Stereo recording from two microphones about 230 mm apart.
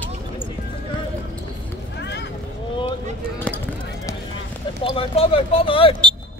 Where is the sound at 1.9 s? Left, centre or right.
Left.